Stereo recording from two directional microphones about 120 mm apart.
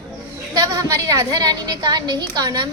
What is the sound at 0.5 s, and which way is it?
A woman's voice, 30° right (ahead or behind).